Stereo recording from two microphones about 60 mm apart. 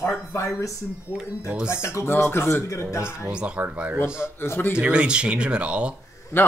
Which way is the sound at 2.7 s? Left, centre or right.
Left.